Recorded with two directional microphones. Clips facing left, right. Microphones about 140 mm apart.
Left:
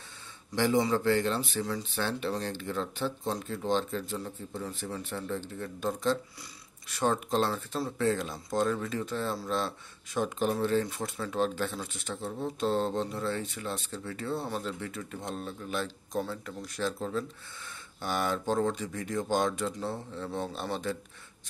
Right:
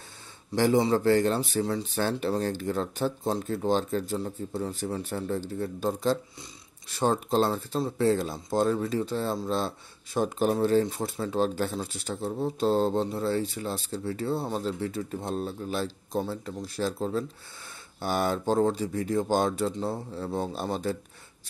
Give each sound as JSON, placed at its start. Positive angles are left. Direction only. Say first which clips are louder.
{"t": 0.6, "sound": "speech", "louder": "right 4 dB", "side_deg": -40}
{"t": 10.8, "sound": "speech", "louder": "right 5 dB", "side_deg": -30}
{"t": 16.2, "sound": "speech", "louder": "right 3 dB", "side_deg": -25}